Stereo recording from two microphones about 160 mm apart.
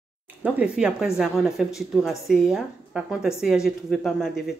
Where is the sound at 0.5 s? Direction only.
5° right (ahead or behind).